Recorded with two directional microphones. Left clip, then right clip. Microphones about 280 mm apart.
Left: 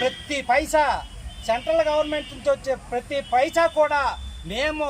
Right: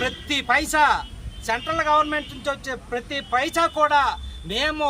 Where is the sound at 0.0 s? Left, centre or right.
Right.